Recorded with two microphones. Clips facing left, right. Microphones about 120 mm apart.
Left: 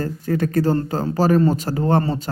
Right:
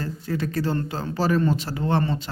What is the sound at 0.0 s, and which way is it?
Speech, 50° left (ahead or behind).